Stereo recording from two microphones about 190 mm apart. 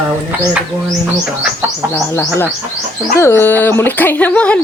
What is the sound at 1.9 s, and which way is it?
Speech, 10° left (ahead or behind).